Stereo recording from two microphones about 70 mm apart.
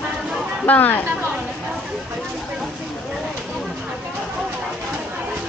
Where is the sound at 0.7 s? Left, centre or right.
Left.